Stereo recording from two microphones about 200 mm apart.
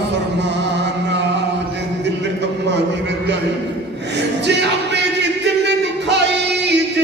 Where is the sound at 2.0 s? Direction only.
60° right (ahead or behind).